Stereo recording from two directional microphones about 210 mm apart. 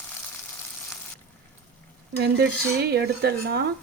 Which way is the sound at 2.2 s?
50° right (ahead or behind).